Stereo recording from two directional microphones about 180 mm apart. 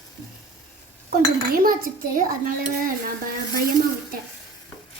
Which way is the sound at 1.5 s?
55° right (ahead or behind).